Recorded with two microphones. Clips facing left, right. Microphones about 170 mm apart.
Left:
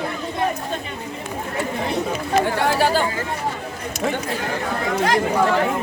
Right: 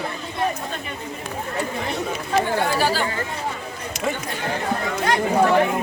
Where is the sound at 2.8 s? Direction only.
55° left (ahead or behind).